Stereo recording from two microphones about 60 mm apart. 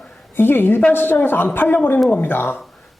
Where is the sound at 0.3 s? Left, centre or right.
Left.